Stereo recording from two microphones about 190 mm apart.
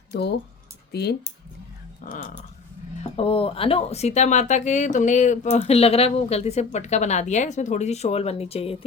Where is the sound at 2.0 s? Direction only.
45° left (ahead or behind).